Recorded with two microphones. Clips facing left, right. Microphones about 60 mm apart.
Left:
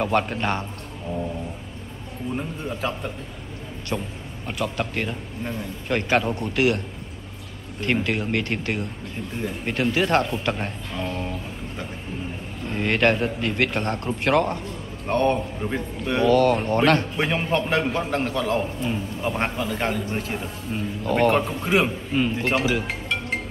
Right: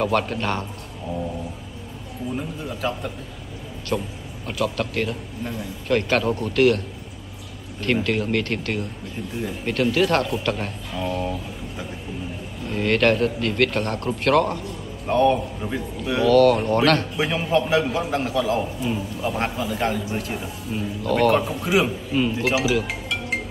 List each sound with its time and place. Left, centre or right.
0.0 s a man's voice: centre
2.6 s a man's voice: centre
7.8 s a man's voice: centre
10.9 s a man's voice: centre
12.7 s a man's voice: centre
15.0 s a man's voice: centre
16.3 s a man's voice: centre
17.2 s a man's voice: centre
21.0 s a man's voice: centre
21.4 s a man's voice: centre
22.4 s a man's voice: centre
22.8 s music: centre